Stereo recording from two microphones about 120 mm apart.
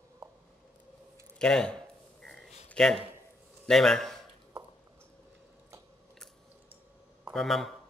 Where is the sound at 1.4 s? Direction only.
5° left (ahead or behind).